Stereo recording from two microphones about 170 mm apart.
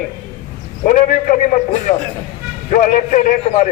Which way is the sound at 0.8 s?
50° left (ahead or behind).